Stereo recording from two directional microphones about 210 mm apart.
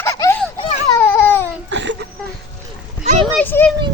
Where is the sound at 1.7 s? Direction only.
60° right (ahead or behind).